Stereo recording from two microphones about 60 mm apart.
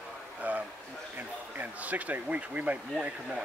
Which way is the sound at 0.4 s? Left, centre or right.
Right.